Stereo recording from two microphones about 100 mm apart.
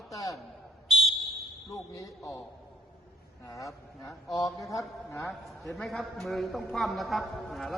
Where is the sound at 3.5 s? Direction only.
30° left (ahead or behind).